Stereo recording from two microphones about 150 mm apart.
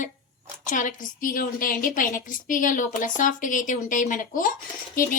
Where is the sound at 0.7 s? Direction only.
60° left (ahead or behind).